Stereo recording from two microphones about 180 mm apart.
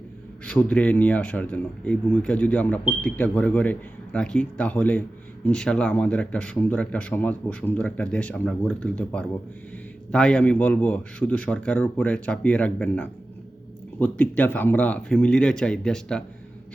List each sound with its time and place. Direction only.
0.4 s speech: 5° left (ahead or behind)